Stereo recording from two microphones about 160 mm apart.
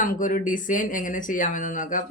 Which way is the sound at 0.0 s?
55° left (ahead or behind).